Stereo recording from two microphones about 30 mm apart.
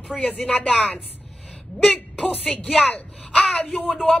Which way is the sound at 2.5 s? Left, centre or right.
Centre.